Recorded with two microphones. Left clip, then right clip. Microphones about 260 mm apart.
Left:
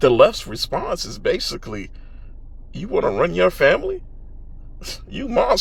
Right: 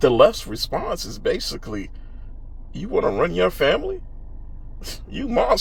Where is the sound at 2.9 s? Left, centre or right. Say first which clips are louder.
Left 1 dB; left.